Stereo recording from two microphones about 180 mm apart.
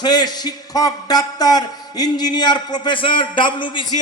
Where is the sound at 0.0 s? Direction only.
25° left (ahead or behind).